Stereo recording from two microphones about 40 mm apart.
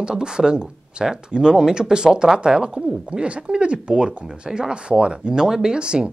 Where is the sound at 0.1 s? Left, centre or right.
Centre.